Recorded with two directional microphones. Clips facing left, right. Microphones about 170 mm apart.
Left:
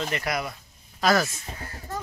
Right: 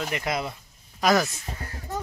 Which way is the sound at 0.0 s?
15° right (ahead or behind).